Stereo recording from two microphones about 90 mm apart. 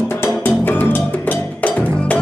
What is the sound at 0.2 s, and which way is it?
Music, 20° left (ahead or behind).